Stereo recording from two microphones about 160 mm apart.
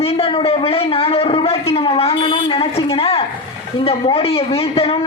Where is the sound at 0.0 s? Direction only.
35° left (ahead or behind).